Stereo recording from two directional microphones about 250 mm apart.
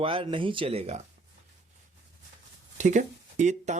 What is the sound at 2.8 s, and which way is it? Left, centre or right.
Speech, right.